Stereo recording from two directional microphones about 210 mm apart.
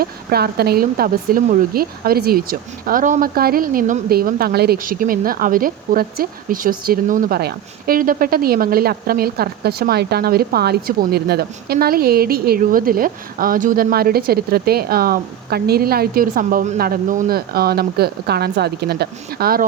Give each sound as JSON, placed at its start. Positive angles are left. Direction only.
{"t": 0.0, "sound": "speech", "side_deg": -45}